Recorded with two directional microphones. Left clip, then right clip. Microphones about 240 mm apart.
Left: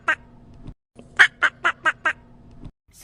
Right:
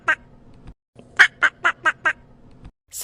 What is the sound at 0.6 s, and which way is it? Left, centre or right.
Quack, centre.